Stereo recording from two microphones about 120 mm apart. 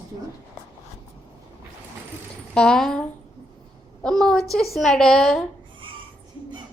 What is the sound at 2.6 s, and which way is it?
Speech, 5° left (ahead or behind).